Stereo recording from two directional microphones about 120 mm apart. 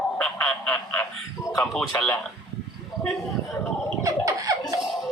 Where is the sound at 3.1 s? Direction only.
Centre (ahead or behind).